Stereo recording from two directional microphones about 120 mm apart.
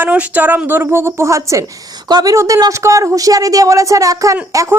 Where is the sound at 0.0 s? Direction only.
10° right (ahead or behind).